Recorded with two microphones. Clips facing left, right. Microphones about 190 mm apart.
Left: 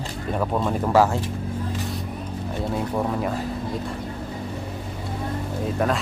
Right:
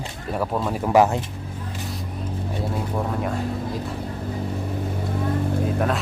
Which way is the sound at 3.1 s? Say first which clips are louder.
Even; centre (ahead or behind).